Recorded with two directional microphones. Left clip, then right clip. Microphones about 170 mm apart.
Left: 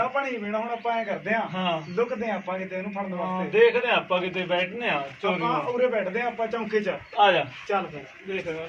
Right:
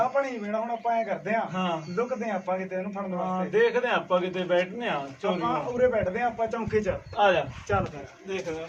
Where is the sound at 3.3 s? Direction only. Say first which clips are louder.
Left 4 dB; 5° right (ahead or behind).